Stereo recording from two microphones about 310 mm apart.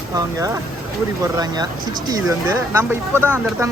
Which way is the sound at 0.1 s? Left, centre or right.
Centre.